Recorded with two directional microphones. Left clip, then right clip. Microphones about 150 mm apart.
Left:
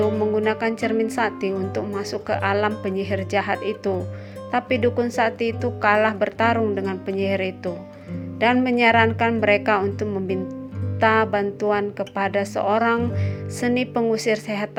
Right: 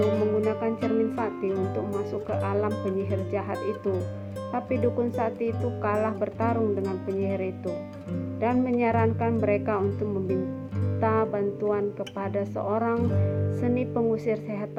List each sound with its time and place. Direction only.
0.0 s music: centre (ahead or behind)
0.4 s speech: 40° left (ahead or behind)
3.6 s speech: centre (ahead or behind)
4.5 s speech: 40° left (ahead or behind)